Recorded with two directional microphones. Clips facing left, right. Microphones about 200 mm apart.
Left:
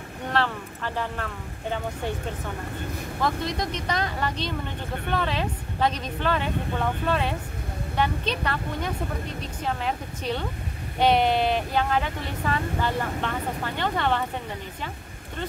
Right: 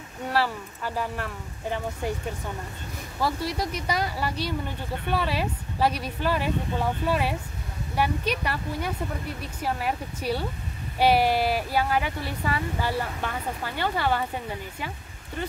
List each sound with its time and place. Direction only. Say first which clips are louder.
0.3 s speech: even; 10° right (ahead or behind)
3.2 s a woman's voice: even; 10° right (ahead or behind)